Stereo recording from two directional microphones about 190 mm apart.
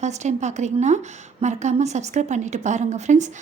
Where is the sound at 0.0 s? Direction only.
40° right (ahead or behind).